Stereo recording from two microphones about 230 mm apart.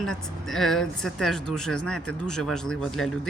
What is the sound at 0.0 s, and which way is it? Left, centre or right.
Speech, centre.